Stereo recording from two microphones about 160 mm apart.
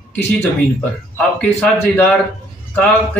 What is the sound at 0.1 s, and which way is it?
A man's voice, 5° left (ahead or behind).